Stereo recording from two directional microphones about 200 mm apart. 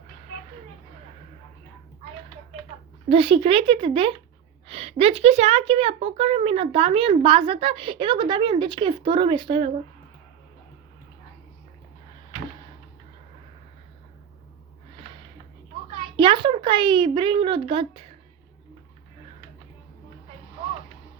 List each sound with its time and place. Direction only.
3.1 s a woman's voice: 30° right (ahead or behind)
16.1 s speech: 25° right (ahead or behind)